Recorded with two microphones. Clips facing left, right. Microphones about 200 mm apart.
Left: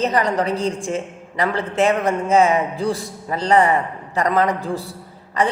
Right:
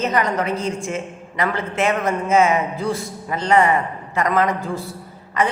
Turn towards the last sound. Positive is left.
turn(degrees=35)  # may be behind; listen again after turning